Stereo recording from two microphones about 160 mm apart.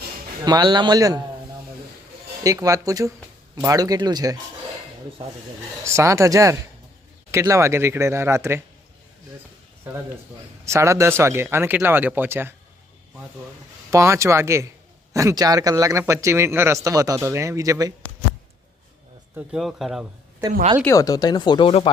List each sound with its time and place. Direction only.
0.4 s speech: 25° right (ahead or behind)
2.4 s speech: 20° right (ahead or behind)
5.8 s speech: 15° right (ahead or behind)
10.7 s speech: 20° right (ahead or behind)
13.9 s speech: 20° right (ahead or behind)
19.4 s a man's voice: 5° right (ahead or behind)
20.9 s speech: 20° left (ahead or behind)